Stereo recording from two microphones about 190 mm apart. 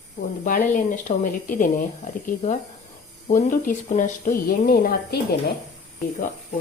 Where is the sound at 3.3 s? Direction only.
45° left (ahead or behind).